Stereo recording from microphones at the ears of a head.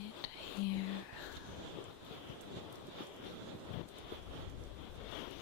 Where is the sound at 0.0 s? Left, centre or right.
Left.